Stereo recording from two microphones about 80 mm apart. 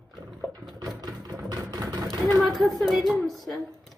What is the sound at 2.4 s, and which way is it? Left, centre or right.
A woman's voice, centre.